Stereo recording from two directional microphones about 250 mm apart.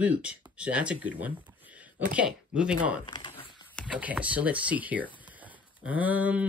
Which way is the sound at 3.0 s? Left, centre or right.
Centre.